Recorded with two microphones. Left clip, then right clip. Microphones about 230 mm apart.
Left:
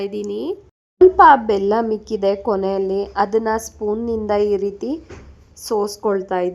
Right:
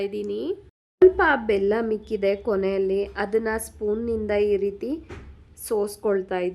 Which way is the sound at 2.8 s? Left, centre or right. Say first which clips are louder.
Left 3 dB; centre.